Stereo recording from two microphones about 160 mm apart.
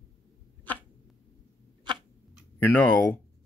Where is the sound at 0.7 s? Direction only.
10° left (ahead or behind).